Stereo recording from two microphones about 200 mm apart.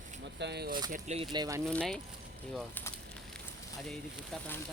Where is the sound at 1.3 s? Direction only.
15° right (ahead or behind).